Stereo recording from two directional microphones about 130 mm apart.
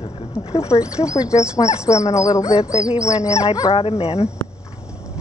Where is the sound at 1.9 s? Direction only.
60° left (ahead or behind).